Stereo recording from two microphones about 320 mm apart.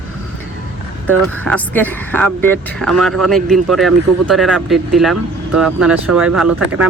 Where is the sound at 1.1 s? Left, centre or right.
Centre.